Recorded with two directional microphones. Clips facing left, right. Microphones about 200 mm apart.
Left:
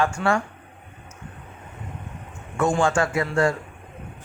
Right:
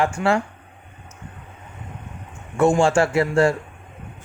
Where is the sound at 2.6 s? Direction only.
25° right (ahead or behind).